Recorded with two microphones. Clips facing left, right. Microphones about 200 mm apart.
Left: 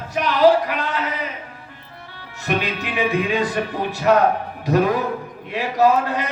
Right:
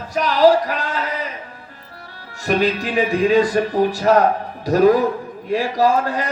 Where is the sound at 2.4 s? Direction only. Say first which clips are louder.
Right 5 dB; 40° right (ahead or behind).